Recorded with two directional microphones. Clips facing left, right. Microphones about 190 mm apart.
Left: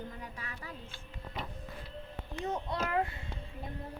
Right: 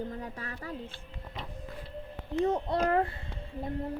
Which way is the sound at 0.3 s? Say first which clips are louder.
Right 5 dB; 40° right (ahead or behind).